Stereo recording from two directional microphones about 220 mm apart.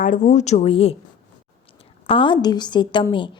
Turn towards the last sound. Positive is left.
turn(degrees=20)  # may be behind; listen again after turning